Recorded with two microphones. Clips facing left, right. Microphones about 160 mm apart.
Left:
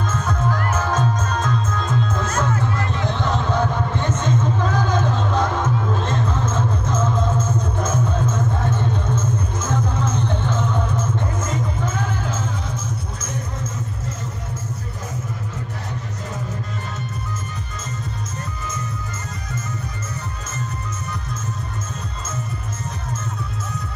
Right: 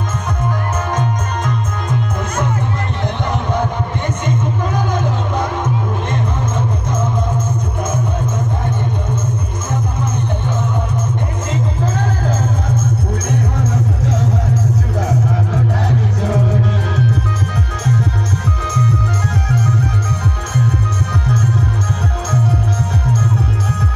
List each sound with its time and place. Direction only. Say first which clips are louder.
0.5 s music: right 1 dB; 15° right (ahead or behind)
3.3 s a sound: right 2 dB; 15° right (ahead or behind)
9.7 s music: right 1 dB; 10° right (ahead or behind)
11.8 s music: right 5 dB; 35° right (ahead or behind)
13.3 s music: right 10 dB; 65° right (ahead or behind)
19.5 s music: right 11 dB; 70° right (ahead or behind)